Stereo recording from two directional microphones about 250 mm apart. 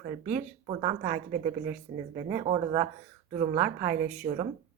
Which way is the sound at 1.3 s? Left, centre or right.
Right.